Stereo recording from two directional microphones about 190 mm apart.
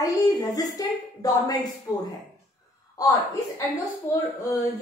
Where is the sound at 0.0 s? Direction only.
20° left (ahead or behind).